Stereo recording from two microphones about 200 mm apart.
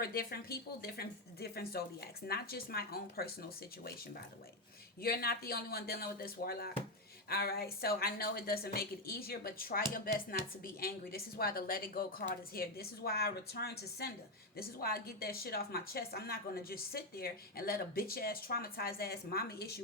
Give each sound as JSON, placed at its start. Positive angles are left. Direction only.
{"t": 0.0, "sound": "speech", "side_deg": 50}
{"t": 5.0, "sound": "speech", "side_deg": 50}